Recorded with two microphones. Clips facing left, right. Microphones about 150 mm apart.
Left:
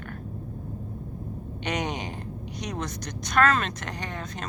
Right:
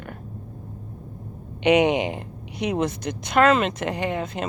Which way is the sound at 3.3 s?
20° right (ahead or behind).